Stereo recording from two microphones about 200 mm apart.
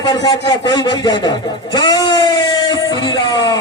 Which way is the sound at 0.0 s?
20° left (ahead or behind).